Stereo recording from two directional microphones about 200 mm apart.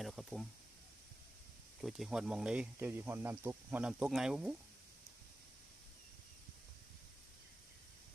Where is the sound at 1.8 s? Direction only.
Centre (ahead or behind).